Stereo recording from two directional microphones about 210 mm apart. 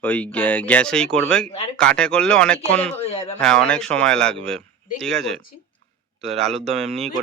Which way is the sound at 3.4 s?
5° left (ahead or behind).